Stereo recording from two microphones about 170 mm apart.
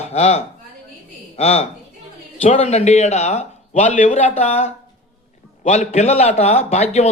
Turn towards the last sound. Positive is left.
turn(degrees=40)  # may be behind; listen again after turning